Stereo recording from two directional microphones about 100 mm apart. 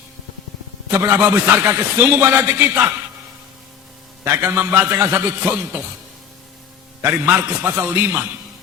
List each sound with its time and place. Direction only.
1.1 s speech: 25° right (ahead or behind)
4.2 s speech: 25° right (ahead or behind)
7.0 s speech: 25° right (ahead or behind)